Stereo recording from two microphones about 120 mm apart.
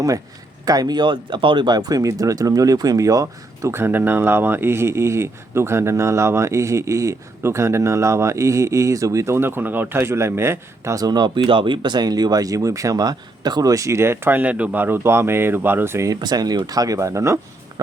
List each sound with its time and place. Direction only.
0.6 s speech: 30° right (ahead or behind)
16.2 s speech: 35° right (ahead or behind)